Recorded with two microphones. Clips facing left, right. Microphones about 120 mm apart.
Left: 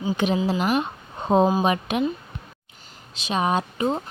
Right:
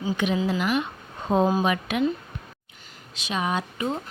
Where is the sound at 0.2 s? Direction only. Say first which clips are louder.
Left 2 dB; 30° left (ahead or behind).